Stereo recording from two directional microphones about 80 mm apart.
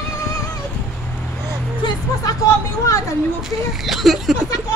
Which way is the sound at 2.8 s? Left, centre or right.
Left.